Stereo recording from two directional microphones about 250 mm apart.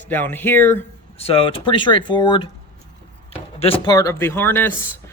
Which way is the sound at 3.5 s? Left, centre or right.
Left.